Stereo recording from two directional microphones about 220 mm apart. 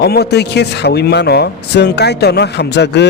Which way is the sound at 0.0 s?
50° left (ahead or behind).